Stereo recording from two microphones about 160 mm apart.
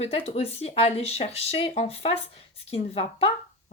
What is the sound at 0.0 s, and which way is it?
Speech, 40° left (ahead or behind).